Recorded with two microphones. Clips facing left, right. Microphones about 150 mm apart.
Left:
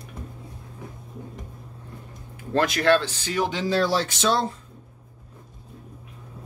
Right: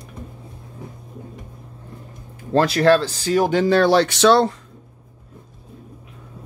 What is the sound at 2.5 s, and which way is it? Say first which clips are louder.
Speech: right 5 dB; 35° right (ahead or behind).